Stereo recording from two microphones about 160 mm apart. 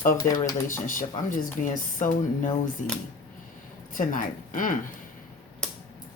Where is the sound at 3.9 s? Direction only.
60° left (ahead or behind).